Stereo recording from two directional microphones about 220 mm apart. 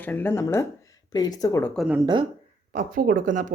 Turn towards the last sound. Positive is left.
turn(degrees=-35)  # may be behind; listen again after turning